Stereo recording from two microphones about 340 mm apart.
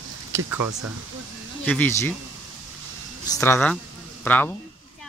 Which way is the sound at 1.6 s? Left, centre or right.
Centre.